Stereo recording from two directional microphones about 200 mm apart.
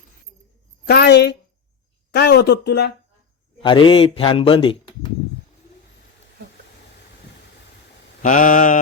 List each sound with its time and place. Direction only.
0.9 s a woman's voice: 55° left (ahead or behind)
3.6 s a man's voice: 25° left (ahead or behind)
8.2 s a sound: 40° left (ahead or behind)